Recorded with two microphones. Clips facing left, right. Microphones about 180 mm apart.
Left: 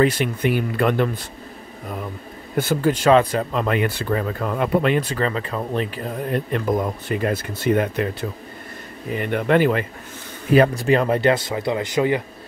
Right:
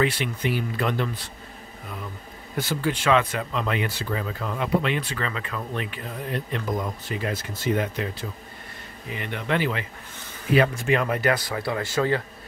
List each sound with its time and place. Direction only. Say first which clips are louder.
0.0 s speech: left 6 dB; 45° left (ahead or behind)
2.5 s speech: left 7 dB; 50° left (ahead or behind)
9.1 s speech: left 8 dB; 50° left (ahead or behind)
10.5 s speech: left 5 dB; 40° left (ahead or behind); by 12.2 s 15° left (ahead or behind)